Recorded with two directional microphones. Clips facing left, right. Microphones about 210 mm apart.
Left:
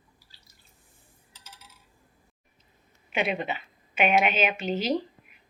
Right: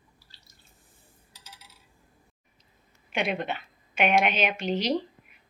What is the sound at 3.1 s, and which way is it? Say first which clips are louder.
A woman's voice: left 1 dB; 5° left (ahead or behind).